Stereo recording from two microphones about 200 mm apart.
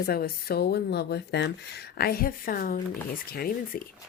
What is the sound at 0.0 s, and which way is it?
A woman's voice, 50° left (ahead or behind).